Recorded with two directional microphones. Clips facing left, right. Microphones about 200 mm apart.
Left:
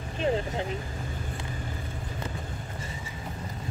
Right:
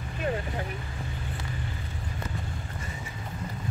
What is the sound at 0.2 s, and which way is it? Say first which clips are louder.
Speech: left 4 dB; 25° left (ahead or behind).